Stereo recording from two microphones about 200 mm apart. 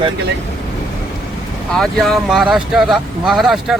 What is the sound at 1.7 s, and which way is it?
Speech, centre (ahead or behind).